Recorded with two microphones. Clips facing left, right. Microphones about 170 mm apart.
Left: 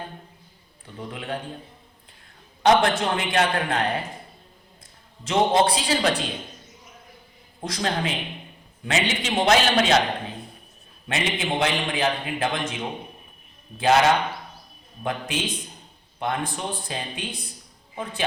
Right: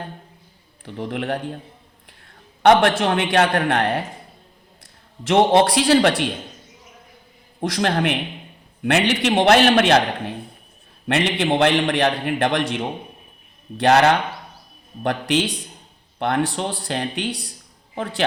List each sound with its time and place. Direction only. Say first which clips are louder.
0.9 s a man's voice: right 7 dB; 70° right (ahead or behind)
2.6 s a man's voice: right 4 dB; 60° right (ahead or behind)
5.3 s a man's voice: right 5 dB; 70° right (ahead or behind)
7.6 s a man's voice: right 6 dB; 70° right (ahead or behind)
15.0 s a man's voice: right 7 dB; 80° right